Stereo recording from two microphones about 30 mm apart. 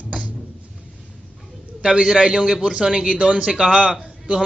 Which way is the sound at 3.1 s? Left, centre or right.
Right.